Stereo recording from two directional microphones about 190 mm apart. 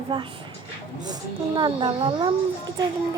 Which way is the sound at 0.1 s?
25° right (ahead or behind).